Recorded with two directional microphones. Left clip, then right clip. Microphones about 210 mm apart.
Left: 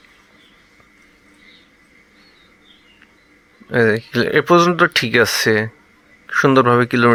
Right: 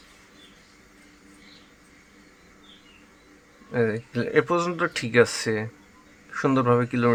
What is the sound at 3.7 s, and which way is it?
Speech, 35° left (ahead or behind).